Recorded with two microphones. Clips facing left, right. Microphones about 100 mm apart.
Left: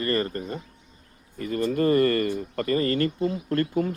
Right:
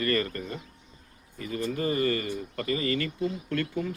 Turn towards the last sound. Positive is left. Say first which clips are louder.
# left 6 dB
turn(degrees=40)  # may be behind; listen again after turning